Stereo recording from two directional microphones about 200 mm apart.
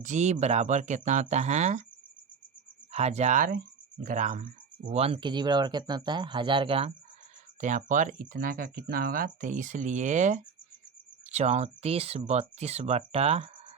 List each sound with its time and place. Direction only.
0.0 s speech: 35° right (ahead or behind)
2.9 s speech: 30° right (ahead or behind)
7.6 s speech: 40° right (ahead or behind)